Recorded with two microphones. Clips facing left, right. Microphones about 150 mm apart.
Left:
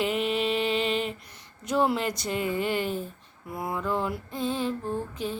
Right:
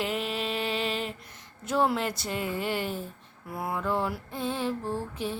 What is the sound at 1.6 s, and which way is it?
Speech, centre (ahead or behind).